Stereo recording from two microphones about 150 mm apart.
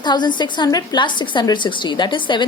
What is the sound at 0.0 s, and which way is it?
A woman's voice, 30° left (ahead or behind).